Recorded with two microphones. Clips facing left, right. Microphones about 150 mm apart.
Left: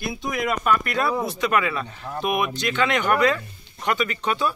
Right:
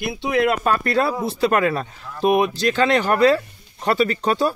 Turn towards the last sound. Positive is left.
turn(degrees=-35)  # may be behind; listen again after turning